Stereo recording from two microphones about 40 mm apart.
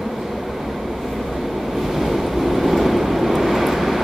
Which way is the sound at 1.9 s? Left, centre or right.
Centre.